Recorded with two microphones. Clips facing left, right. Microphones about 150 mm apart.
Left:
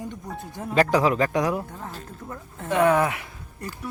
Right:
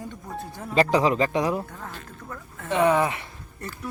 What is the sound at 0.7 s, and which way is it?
Speech, centre (ahead or behind).